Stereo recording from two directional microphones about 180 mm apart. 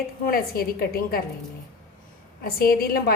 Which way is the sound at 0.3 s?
55° left (ahead or behind).